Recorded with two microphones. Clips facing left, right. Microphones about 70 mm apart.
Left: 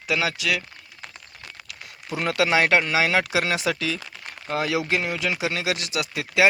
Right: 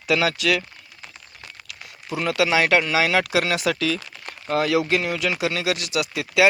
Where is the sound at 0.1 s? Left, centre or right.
Centre.